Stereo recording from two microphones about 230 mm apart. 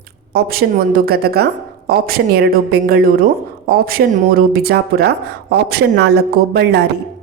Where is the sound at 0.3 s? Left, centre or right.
Right.